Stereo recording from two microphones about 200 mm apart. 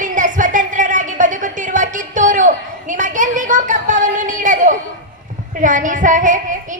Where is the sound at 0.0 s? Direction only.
40° right (ahead or behind).